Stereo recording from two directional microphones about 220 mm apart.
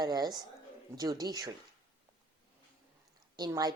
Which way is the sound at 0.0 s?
20° right (ahead or behind).